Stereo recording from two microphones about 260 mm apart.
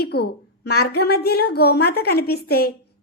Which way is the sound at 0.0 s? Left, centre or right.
Left.